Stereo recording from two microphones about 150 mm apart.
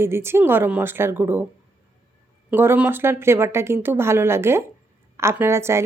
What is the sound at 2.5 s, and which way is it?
A woman's voice, 10° right (ahead or behind).